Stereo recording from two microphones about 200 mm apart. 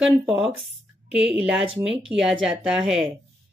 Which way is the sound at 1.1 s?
5° right (ahead or behind).